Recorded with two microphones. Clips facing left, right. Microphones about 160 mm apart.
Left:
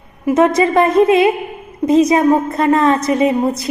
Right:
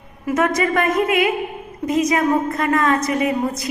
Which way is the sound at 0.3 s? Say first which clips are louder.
Left 6 dB; 25° left (ahead or behind).